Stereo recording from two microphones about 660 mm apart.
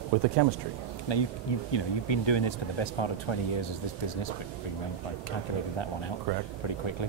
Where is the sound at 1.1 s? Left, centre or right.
Left.